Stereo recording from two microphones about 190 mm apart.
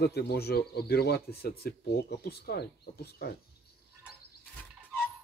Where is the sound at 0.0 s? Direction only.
60° left (ahead or behind).